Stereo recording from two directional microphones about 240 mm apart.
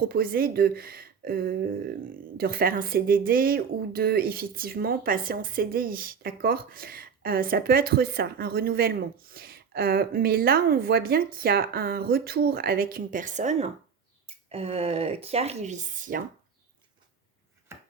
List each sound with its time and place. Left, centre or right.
0.1 s speech: right